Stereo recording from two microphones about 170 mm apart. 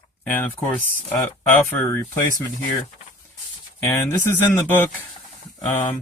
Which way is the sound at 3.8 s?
15° left (ahead or behind).